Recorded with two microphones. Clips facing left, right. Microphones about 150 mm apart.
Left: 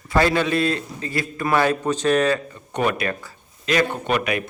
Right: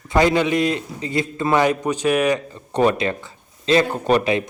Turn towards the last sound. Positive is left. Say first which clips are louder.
# right 5 dB
turn(degrees=-30)  # may be behind; listen again after turning